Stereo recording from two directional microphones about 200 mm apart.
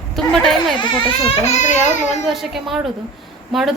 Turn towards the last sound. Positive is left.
turn(degrees=0)  # may be behind; listen again after turning